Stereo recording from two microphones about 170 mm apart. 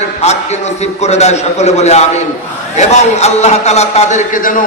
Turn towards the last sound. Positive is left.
turn(degrees=50)  # may be behind; listen again after turning